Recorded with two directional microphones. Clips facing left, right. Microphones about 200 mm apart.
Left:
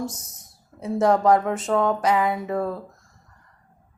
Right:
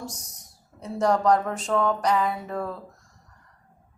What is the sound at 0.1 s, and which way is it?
Speech, 5° left (ahead or behind).